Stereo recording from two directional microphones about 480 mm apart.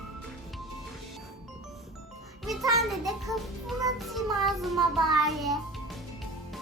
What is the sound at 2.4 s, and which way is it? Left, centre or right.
Music, centre.